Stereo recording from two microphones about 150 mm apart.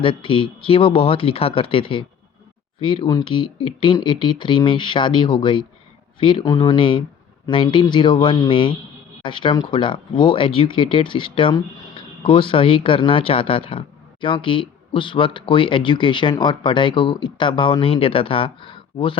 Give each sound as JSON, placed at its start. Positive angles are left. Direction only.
{"t": 0.0, "sound": "speech", "side_deg": 35}